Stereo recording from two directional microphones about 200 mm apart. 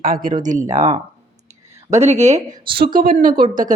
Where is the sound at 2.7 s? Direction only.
50° right (ahead or behind).